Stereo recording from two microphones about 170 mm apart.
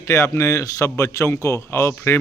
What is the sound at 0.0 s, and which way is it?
Speech, 15° left (ahead or behind).